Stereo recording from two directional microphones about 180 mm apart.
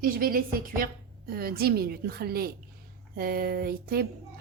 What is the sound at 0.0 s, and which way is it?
A woman's voice, 55° right (ahead or behind).